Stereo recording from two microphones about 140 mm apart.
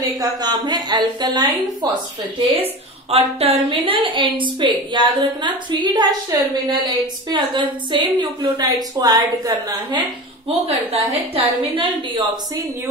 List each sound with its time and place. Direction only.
0.0 s a woman's voice: 30° right (ahead or behind)
2.5 s a woman's voice: 45° right (ahead or behind); by 9.8 s 25° right (ahead or behind)
10.6 s a woman's voice: 45° right (ahead or behind)